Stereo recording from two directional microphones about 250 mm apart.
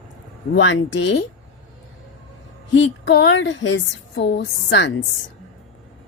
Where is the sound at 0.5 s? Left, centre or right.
Left.